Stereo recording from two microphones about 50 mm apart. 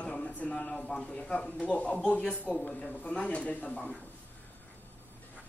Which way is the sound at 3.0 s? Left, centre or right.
Left.